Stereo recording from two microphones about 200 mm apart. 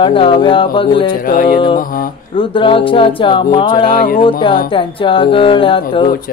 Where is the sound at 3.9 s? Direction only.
45° left (ahead or behind).